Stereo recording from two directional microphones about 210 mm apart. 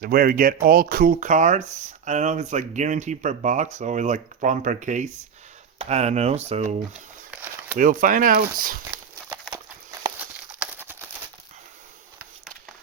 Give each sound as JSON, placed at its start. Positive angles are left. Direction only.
{"t": 0.0, "sound": "speech", "side_deg": -45}
{"t": 7.8, "sound": "speech", "side_deg": -40}
{"t": 10.2, "sound": "a sound", "side_deg": -10}